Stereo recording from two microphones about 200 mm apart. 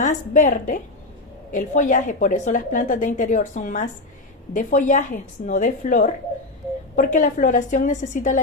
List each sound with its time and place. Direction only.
0.0 s a woman's voice: 40° left (ahead or behind)